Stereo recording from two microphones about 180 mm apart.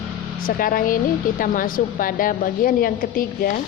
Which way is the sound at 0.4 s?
50° left (ahead or behind).